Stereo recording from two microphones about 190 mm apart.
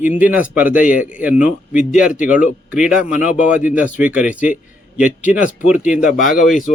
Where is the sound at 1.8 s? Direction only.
45° left (ahead or behind).